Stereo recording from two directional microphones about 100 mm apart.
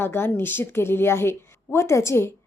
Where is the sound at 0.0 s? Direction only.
20° left (ahead or behind).